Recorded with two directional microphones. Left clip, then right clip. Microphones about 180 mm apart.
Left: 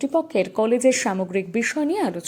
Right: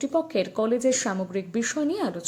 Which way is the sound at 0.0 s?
10° left (ahead or behind).